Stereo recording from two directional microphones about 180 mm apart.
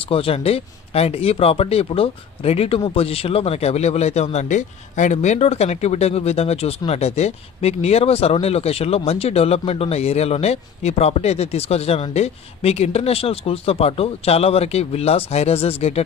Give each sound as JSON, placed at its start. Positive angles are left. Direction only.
{"t": 0.0, "sound": "speech", "side_deg": 30}